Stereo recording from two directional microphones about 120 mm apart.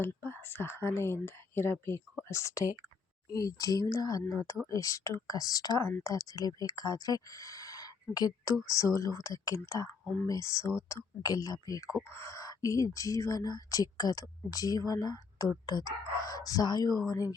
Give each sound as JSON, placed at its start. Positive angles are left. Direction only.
{"t": 0.0, "sound": "speech", "side_deg": 20}